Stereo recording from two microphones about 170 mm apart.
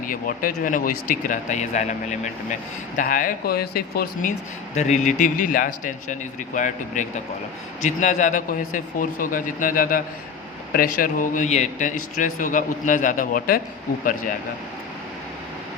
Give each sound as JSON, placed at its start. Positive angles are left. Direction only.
{"t": 0.1, "sound": "speech", "side_deg": 55}
{"t": 4.7, "sound": "speech", "side_deg": 40}